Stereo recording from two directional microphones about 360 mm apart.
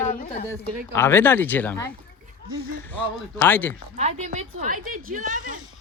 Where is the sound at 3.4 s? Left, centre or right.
Centre.